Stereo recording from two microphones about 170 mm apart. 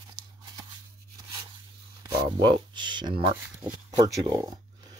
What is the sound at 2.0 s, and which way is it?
Speech, 25° right (ahead or behind).